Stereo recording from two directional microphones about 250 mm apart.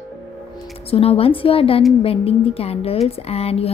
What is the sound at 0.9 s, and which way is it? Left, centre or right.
A woman's voice, left.